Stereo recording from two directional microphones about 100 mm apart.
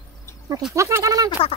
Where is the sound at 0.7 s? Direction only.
30° right (ahead or behind).